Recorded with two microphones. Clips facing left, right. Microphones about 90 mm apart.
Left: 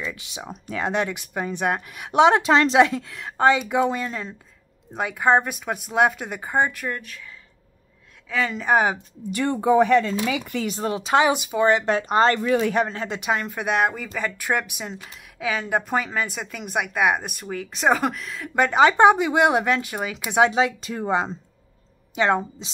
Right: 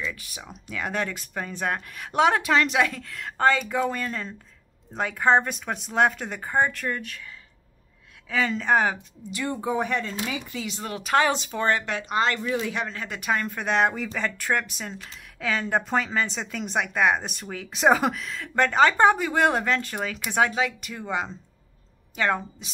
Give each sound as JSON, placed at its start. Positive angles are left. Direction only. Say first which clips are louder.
{"t": 0.0, "sound": "speech", "louder": "left 1 dB", "side_deg": 20}
{"t": 0.4, "sound": "speech", "louder": "left 8 dB", "side_deg": 35}
{"t": 0.8, "sound": "speech", "louder": "left 4 dB", "side_deg": 15}
{"t": 8.3, "sound": "speech", "louder": "left 1 dB", "side_deg": 0}
{"t": 9.3, "sound": "speech", "louder": "left 8 dB", "side_deg": 65}
{"t": 10.6, "sound": "speech", "louder": "left 7 dB", "side_deg": 40}
{"t": 10.9, "sound": "speech", "louder": "left 3 dB", "side_deg": 25}
{"t": 11.8, "sound": "speech", "louder": "left 6 dB", "side_deg": 35}
{"t": 12.4, "sound": "speech", "louder": "left 6 dB", "side_deg": 65}
{"t": 12.7, "sound": "speech", "louder": "left 7 dB", "side_deg": 35}
{"t": 13.3, "sound": "speech", "louder": "left 1 dB", "side_deg": 15}
{"t": 20.9, "sound": "speech", "louder": "left 6 dB", "side_deg": 35}
{"t": 22.1, "sound": "speech", "louder": "left 4 dB", "side_deg": 20}